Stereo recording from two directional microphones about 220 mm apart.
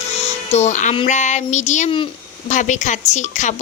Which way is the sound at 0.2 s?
30° left (ahead or behind).